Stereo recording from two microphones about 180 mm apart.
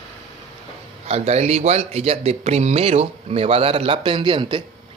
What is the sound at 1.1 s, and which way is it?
Speech, 35° right (ahead or behind).